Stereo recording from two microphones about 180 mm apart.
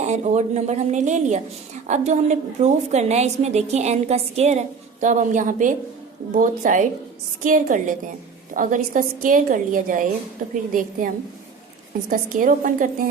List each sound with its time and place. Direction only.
0.0 s a woman's voice: 40° right (ahead or behind)